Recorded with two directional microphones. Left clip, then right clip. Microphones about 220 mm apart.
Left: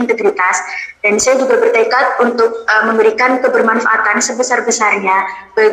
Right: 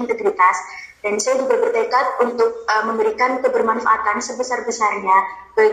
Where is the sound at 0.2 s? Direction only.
55° left (ahead or behind).